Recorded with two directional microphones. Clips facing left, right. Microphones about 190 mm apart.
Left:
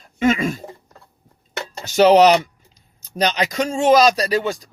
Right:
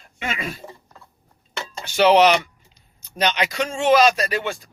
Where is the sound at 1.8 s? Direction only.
40° left (ahead or behind).